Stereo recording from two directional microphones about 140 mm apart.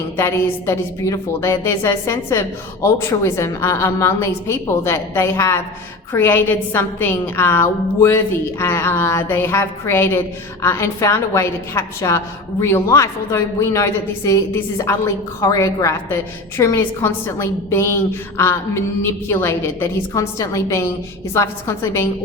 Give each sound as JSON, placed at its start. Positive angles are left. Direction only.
{"t": 0.2, "sound": "a woman's voice", "side_deg": 20}